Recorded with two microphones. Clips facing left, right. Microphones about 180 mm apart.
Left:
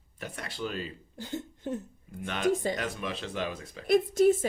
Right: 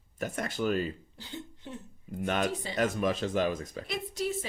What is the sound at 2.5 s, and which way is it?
Speech, 45° left (ahead or behind).